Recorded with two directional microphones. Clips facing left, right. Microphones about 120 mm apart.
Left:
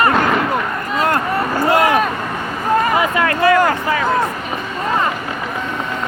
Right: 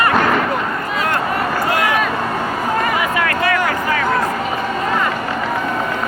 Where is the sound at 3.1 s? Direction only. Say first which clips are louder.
Left 4 dB; 30° left (ahead or behind).